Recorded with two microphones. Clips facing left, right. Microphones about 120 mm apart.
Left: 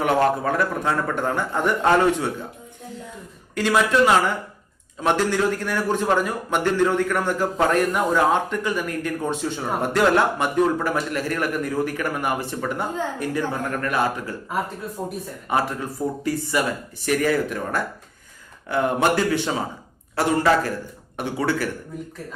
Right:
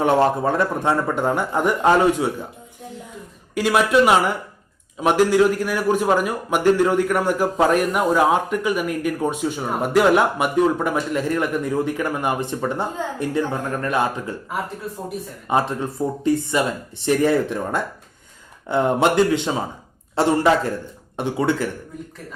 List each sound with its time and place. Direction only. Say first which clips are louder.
0.0 s a man's voice: right 2 dB; 25° right (ahead or behind)
3.5 s a man's voice: right 2 dB; 15° right (ahead or behind)
15.4 s a man's voice: right 3 dB; 25° right (ahead or behind)